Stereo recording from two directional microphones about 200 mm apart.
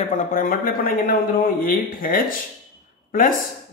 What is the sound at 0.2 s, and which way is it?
Speech, 40° left (ahead or behind).